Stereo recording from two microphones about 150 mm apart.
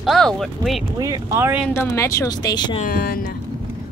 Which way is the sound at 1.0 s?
20° right (ahead or behind).